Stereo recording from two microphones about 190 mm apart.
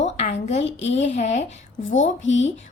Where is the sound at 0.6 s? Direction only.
70° left (ahead or behind).